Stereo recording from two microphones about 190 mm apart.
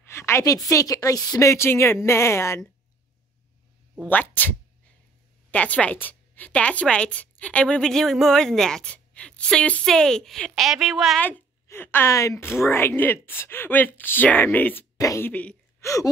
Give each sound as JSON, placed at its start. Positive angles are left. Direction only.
{"t": 0.0, "sound": "a sound", "side_deg": 15}
{"t": 0.7, "sound": "a woman's voice", "side_deg": 15}
{"t": 4.1, "sound": "a woman's voice", "side_deg": 10}
{"t": 11.2, "sound": "a woman's voice", "side_deg": 10}